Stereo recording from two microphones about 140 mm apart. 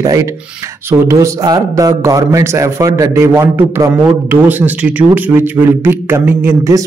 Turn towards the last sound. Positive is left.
turn(degrees=-20)  # may be behind; listen again after turning